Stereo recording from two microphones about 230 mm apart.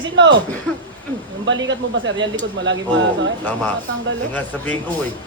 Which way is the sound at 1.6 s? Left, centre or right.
Right.